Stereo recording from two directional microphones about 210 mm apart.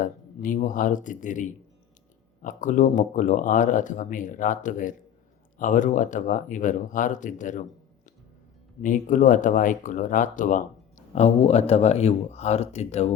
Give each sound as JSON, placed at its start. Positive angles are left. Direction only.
{"t": 0.0, "sound": "speech", "side_deg": 40}
{"t": 8.8, "sound": "speech", "side_deg": 40}